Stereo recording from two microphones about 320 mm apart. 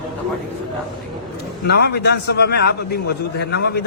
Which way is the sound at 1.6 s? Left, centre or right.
Left.